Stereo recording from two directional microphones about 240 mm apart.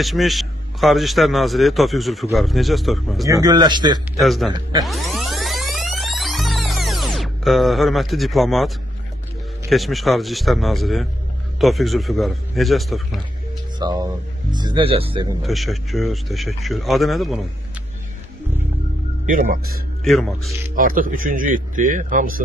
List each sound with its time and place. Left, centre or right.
0.0 s a man's voice: centre
3.3 s speech: centre
4.2 s a man's voice: centre
4.8 s music: centre
9.7 s a man's voice: centre
13.7 s speech: centre
15.4 s a man's voice: centre
19.2 s speech: right
20.1 s a man's voice: centre
20.7 s speech: right